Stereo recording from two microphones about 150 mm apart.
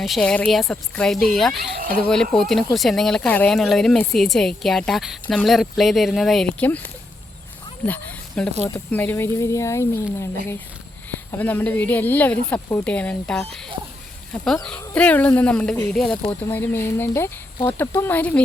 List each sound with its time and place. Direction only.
0.0 s speech: 5° left (ahead or behind)
7.9 s speech: 10° left (ahead or behind)